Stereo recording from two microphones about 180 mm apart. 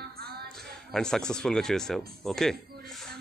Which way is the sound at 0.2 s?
60° right (ahead or behind).